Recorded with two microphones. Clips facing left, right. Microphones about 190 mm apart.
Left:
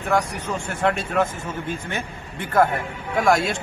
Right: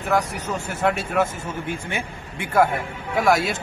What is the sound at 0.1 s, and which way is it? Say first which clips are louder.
A man's voice: even; 5° right (ahead or behind).